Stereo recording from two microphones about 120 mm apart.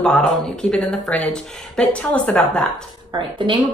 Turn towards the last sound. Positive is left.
turn(degrees=-45)  # may be behind; listen again after turning